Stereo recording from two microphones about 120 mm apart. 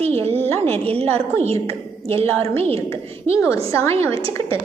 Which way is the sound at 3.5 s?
25° left (ahead or behind).